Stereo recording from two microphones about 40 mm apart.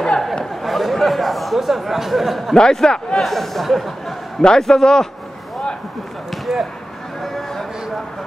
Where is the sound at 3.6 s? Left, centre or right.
Centre.